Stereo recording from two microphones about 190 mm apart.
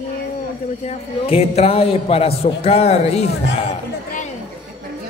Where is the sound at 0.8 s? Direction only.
30° left (ahead or behind).